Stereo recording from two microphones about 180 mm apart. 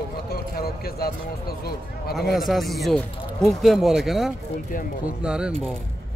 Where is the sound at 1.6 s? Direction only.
60° left (ahead or behind).